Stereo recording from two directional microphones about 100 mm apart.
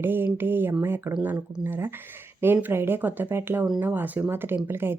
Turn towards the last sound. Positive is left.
turn(degrees=-20)  # may be behind; listen again after turning